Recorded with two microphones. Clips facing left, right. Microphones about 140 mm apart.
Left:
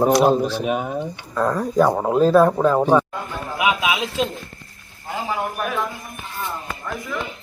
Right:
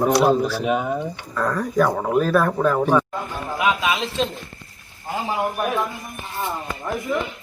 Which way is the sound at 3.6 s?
10° left (ahead or behind).